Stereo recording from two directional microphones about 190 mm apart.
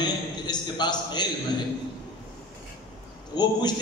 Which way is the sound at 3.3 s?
20° left (ahead or behind).